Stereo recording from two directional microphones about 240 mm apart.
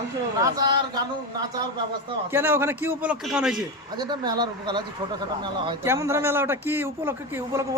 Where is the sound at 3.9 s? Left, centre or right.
Centre.